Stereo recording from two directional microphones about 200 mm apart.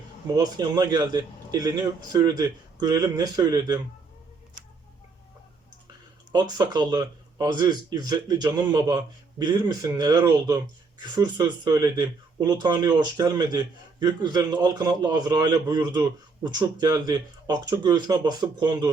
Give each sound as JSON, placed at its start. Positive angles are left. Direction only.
{"t": 0.3, "sound": "a man's voice", "side_deg": -20}
{"t": 6.3, "sound": "a man's voice", "side_deg": -20}